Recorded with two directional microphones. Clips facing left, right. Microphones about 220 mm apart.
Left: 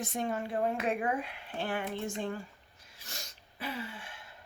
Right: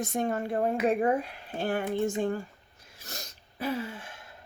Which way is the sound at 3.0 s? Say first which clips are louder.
Right 5 dB; 40° right (ahead or behind).